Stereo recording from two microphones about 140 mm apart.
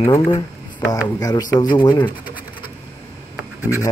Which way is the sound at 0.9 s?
25° left (ahead or behind).